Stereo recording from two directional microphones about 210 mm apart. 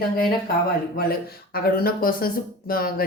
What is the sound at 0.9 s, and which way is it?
Speech, 45° left (ahead or behind).